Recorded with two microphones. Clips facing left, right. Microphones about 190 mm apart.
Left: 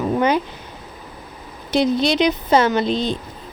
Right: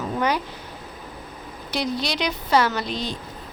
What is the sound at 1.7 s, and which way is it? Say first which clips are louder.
Speech: left 9 dB; 25° left (ahead or behind).